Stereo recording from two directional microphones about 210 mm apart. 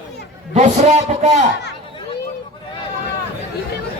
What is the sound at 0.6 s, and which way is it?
Speech, 30° right (ahead or behind).